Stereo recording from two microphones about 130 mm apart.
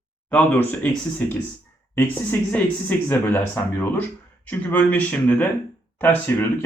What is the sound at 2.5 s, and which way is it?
Speech, 15° left (ahead or behind).